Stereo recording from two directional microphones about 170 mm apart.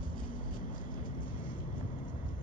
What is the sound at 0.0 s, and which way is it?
Vehicle, 55° left (ahead or behind).